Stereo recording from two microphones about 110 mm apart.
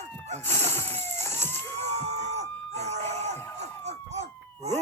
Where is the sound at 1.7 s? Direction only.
80° right.